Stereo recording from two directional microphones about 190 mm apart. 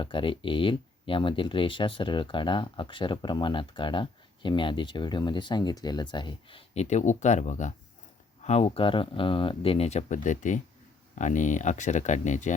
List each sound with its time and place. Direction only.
0.0 s speech: 25° left (ahead or behind)